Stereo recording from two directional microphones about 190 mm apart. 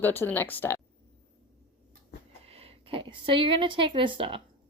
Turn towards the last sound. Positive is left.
turn(degrees=-30)  # may be behind; listen again after turning